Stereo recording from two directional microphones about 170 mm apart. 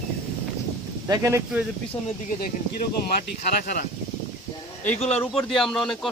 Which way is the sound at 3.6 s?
55° left (ahead or behind).